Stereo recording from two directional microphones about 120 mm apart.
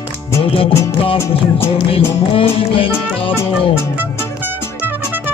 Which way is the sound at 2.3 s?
50° left (ahead or behind).